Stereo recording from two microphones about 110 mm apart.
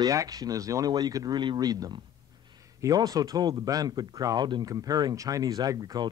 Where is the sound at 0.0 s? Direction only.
30° right (ahead or behind).